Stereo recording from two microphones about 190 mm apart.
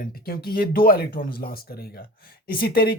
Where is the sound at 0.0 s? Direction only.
50° left (ahead or behind).